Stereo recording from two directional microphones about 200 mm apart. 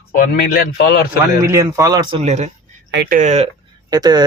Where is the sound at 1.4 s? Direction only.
15° right (ahead or behind); by 2.5 s 35° right (ahead or behind).